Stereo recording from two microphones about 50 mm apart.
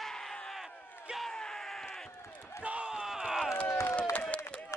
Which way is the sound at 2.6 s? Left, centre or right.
Right.